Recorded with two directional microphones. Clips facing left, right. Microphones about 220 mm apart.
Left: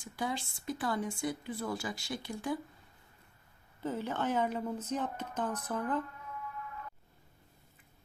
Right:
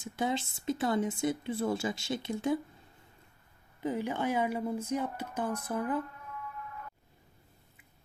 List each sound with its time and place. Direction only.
0.0 s speech: 25° right (ahead or behind)
3.8 s speech: 15° right (ahead or behind)